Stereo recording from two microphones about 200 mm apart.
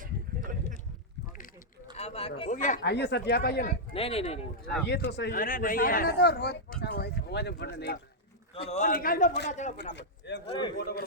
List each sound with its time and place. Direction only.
2.0 s speech: 30° left (ahead or behind)
2.8 s speech: 55° left (ahead or behind)
3.9 s speech: 30° left (ahead or behind)
4.9 s speech: 55° left (ahead or behind)
8.5 s a man's voice: 30° left (ahead or behind)
8.9 s speech: 45° left (ahead or behind)
9.5 s a man's voice: 35° left (ahead or behind)
9.9 s speech: 60° left (ahead or behind)